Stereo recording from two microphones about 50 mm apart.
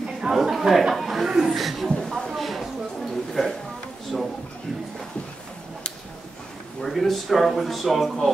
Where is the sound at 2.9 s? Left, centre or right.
Centre.